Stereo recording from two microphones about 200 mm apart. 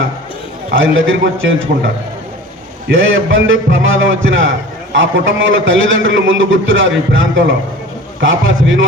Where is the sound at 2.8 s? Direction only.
75° right (ahead or behind).